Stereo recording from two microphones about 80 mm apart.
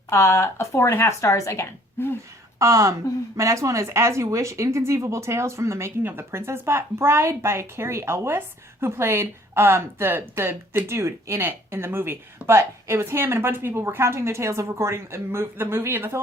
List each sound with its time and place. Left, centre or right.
0.1 s speech: left
2.0 s speech: left
2.6 s speech: right